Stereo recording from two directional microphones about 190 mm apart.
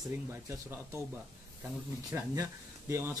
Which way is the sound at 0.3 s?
15° right (ahead or behind).